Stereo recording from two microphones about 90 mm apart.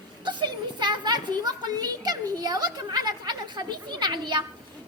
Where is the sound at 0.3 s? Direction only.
55° right (ahead or behind).